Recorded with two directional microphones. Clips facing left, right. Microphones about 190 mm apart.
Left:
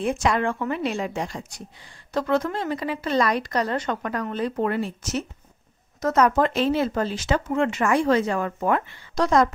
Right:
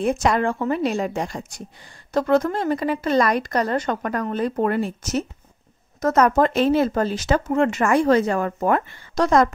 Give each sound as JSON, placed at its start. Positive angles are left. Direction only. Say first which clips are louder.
{"t": 0.0, "sound": "a woman's voice", "louder": "right 3 dB", "side_deg": -40}